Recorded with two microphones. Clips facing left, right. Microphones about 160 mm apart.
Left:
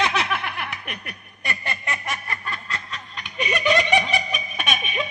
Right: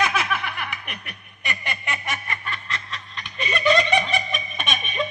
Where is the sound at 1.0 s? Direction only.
35° left (ahead or behind).